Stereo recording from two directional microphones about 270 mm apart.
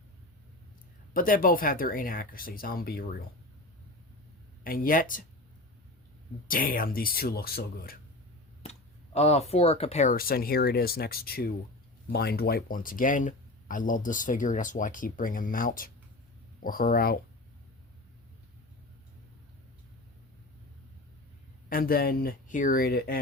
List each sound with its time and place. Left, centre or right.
1.1 s speech: left
4.6 s speech: left
6.5 s speech: left
9.1 s speech: left
21.7 s speech: left